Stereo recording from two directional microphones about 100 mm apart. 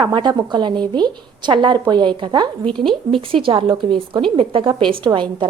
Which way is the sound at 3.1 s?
60° right (ahead or behind).